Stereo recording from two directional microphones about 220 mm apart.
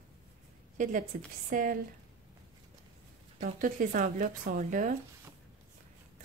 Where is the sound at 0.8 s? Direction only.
35° right (ahead or behind).